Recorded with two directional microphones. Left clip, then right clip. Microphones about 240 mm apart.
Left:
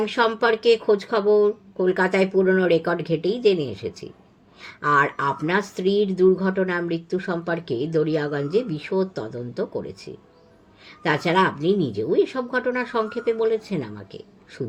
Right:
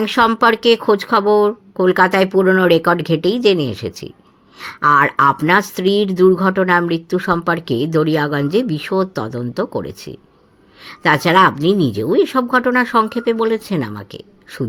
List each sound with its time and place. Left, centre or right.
0.0 s speech: right